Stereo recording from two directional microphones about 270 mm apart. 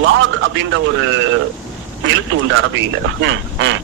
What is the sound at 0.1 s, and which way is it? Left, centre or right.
Speech, right.